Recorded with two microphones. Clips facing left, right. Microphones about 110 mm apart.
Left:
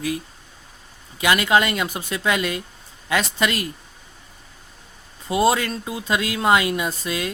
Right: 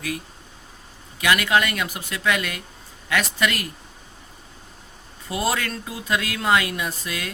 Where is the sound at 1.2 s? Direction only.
25° left (ahead or behind).